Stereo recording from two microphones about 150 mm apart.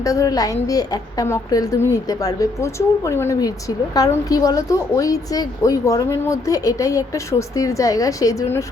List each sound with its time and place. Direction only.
0.0 s a woman's voice: 20° left (ahead or behind)